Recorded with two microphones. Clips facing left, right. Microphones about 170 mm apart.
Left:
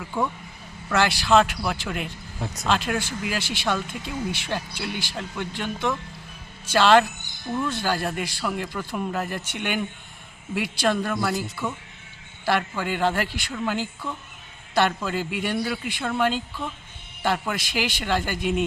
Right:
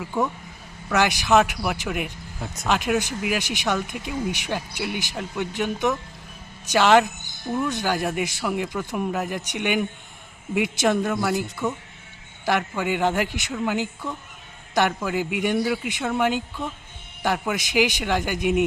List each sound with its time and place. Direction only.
0.0 s speech: 10° right (ahead or behind)
12.5 s speech: 15° right (ahead or behind)